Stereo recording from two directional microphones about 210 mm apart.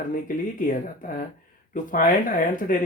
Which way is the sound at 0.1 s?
40° left (ahead or behind).